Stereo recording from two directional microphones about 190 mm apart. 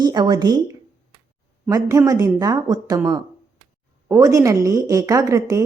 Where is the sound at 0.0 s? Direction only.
20° right (ahead or behind).